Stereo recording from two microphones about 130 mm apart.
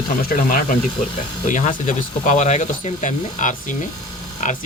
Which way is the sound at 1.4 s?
80° left.